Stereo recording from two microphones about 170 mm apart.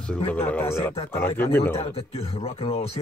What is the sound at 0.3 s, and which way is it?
Speech, 10° left (ahead or behind).